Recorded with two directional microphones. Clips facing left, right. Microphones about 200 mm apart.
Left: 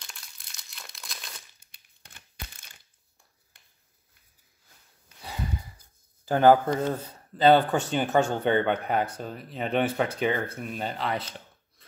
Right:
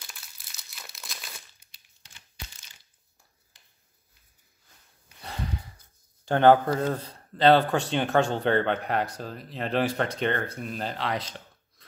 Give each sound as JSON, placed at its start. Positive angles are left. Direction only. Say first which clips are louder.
{"t": 0.0, "sound": "crumpling", "louder": "even", "side_deg": -5}
{"t": 1.6, "sound": "crumpling", "louder": "left 4 dB", "side_deg": 55}
{"t": 3.5, "sound": "a sound", "louder": "left 1 dB", "side_deg": 55}
{"t": 6.2, "sound": "speech", "louder": "even", "side_deg": 5}